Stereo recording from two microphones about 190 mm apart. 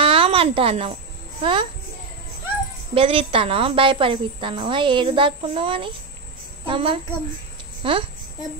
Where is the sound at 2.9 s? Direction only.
30° right (ahead or behind).